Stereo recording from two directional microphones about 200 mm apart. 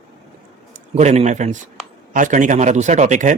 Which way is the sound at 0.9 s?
35° right (ahead or behind).